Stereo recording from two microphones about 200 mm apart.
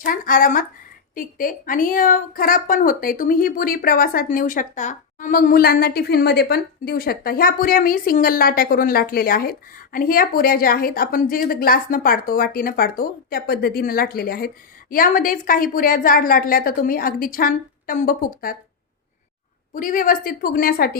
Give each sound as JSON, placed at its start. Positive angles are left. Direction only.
{"t": 0.0, "sound": "a woman's voice", "side_deg": 45}
{"t": 19.7, "sound": "a woman's voice", "side_deg": 40}